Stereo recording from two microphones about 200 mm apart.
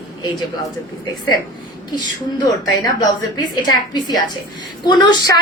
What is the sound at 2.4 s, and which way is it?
A woman's voice, 20° left (ahead or behind).